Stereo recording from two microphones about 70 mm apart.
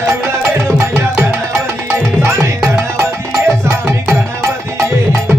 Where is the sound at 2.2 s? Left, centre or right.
Right.